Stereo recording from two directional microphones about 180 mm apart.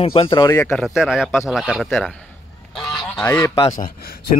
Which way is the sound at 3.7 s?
55° left (ahead or behind).